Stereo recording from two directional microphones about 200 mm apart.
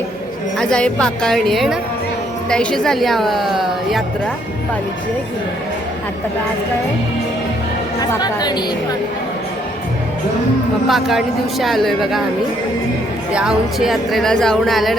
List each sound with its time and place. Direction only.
0.6 s speech: 5° left (ahead or behind)
8.2 s a woman's voice: 20° left (ahead or behind)
10.8 s speech: centre (ahead or behind)
13.3 s speech: 5° right (ahead or behind)